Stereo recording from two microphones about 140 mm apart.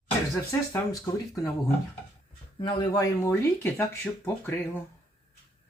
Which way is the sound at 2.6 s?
30° left (ahead or behind).